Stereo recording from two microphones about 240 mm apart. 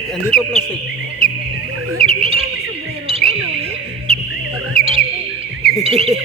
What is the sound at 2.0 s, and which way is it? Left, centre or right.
Bird, right.